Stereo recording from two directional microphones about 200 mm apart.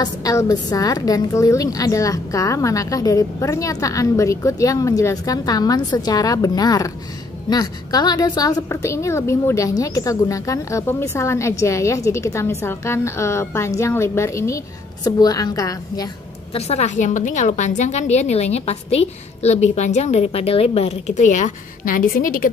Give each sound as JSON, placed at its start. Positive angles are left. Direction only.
{"t": 0.0, "sound": "a woman's voice", "side_deg": 15}
{"t": 16.5, "sound": "a woman's voice", "side_deg": 30}